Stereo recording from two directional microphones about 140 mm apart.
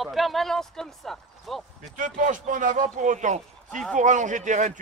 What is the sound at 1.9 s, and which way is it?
A man's voice, 65° right (ahead or behind).